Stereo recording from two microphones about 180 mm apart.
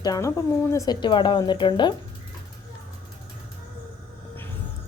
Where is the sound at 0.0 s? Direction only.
20° left (ahead or behind).